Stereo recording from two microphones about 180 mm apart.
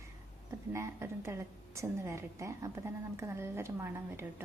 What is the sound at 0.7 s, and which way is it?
A woman's voice, 15° right (ahead or behind).